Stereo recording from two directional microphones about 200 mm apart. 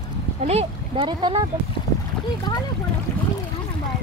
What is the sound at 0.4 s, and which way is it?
Speech, 30° right (ahead or behind).